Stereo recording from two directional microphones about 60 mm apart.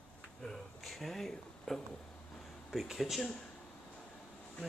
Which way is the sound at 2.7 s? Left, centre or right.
Centre.